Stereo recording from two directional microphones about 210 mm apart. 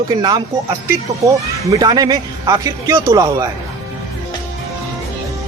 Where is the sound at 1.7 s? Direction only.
20° right (ahead or behind).